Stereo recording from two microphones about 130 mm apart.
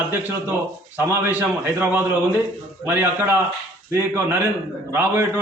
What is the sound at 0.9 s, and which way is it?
A man's voice, 15° right (ahead or behind).